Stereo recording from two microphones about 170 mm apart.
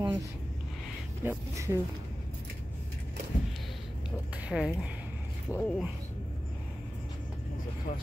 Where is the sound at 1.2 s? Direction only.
15° right (ahead or behind).